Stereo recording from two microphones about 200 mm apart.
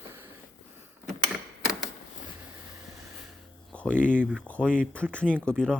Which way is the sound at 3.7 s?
5° left (ahead or behind).